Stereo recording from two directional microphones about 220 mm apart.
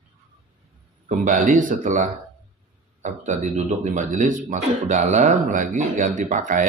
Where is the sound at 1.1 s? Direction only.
35° right (ahead or behind).